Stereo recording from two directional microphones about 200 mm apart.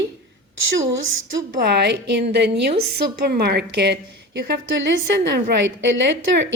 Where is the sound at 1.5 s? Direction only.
55° right (ahead or behind).